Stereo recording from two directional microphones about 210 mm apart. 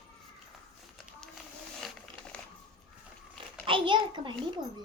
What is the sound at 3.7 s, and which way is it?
Speech, 25° right (ahead or behind).